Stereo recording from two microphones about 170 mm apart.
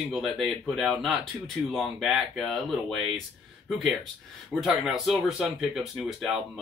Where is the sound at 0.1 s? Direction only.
Centre (ahead or behind).